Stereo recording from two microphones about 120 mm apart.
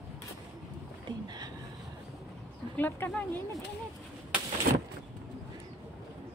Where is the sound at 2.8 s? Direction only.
15° left (ahead or behind).